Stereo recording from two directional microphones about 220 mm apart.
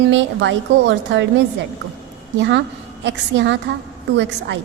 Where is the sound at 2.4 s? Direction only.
55° right (ahead or behind).